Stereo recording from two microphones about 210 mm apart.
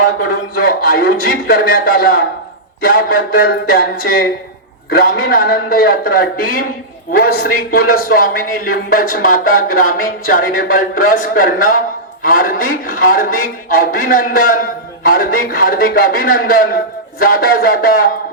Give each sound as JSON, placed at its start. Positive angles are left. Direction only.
{"t": 0.2, "sound": "a man's voice", "side_deg": 45}